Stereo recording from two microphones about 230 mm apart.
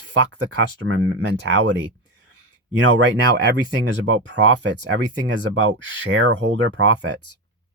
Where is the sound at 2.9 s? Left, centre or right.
Right.